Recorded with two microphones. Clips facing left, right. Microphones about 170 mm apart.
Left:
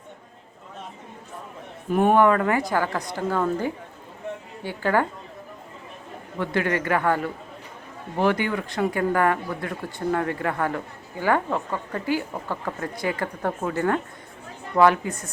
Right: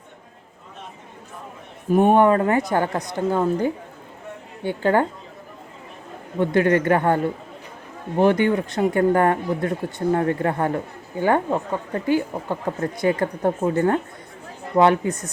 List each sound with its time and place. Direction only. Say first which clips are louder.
2.0 s speech: right 2 dB; 20° right (ahead or behind)
6.4 s speech: right 7 dB; 20° right (ahead or behind)